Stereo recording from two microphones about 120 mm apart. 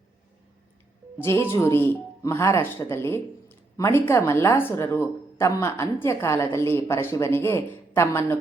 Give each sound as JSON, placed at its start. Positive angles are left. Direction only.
{"t": 1.2, "sound": "speech", "side_deg": 20}